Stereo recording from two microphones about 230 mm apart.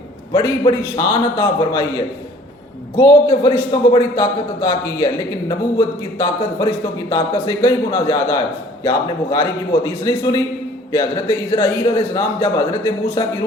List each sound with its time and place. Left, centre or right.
0.3 s speech: centre
3.0 s speech: centre
6.1 s speech: centre